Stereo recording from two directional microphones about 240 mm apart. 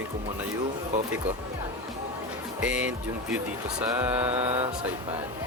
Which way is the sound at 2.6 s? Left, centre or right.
Centre.